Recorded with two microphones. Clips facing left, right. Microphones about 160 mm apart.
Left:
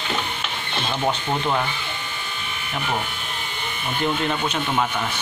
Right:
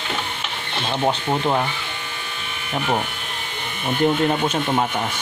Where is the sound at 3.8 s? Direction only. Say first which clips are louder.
Right 5 dB; 45° right (ahead or behind).